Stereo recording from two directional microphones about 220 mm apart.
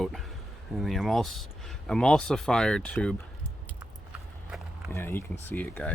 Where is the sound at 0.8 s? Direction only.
Centre (ahead or behind).